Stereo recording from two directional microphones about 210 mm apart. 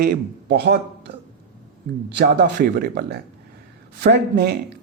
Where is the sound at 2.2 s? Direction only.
55° right (ahead or behind).